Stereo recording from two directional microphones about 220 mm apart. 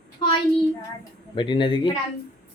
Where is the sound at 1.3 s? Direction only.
20° left (ahead or behind).